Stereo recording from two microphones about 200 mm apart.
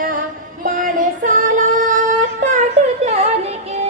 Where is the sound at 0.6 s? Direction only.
40° right (ahead or behind).